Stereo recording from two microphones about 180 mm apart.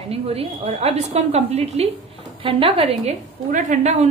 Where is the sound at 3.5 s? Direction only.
45° right (ahead or behind).